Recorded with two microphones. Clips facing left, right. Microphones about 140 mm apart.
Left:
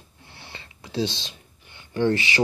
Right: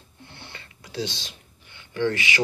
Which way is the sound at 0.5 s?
25° left (ahead or behind).